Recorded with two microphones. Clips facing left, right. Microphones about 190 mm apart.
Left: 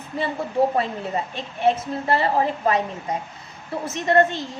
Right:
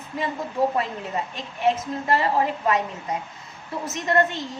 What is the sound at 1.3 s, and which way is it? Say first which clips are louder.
A woman's voice: left 2 dB; 30° left (ahead or behind).